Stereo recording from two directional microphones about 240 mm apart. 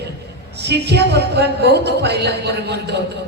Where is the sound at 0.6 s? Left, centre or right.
Right.